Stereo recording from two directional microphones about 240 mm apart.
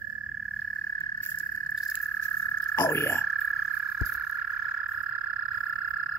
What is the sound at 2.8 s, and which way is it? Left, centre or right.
Frog, centre.